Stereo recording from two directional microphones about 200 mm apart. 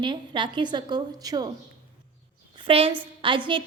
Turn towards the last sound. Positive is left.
turn(degrees=-25)  # may be behind; listen again after turning